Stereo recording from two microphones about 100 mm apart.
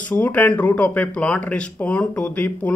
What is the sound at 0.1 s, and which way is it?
A man's voice, 20° left (ahead or behind).